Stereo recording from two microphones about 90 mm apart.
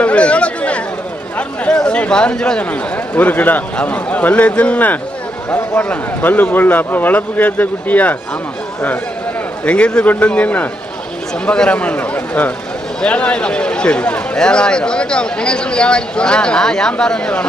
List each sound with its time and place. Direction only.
0.0 s chatter: 15° left (ahead or behind)
1.4 s a man's voice: 10° left (ahead or behind)
9.6 s a man's voice: 10° left (ahead or behind)